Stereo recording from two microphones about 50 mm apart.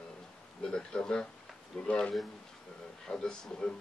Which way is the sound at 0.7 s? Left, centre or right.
Centre.